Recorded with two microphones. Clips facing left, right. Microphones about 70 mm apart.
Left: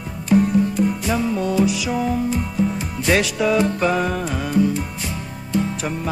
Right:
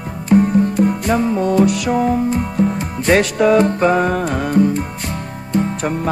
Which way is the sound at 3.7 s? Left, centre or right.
Right.